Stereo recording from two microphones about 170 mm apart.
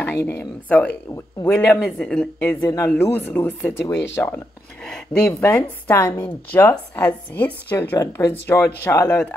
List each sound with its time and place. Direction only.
0.0 s speech: 15° left (ahead or behind)
2.6 s speech: 20° left (ahead or behind)